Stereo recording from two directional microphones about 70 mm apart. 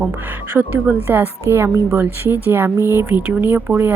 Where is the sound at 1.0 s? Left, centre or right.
Right.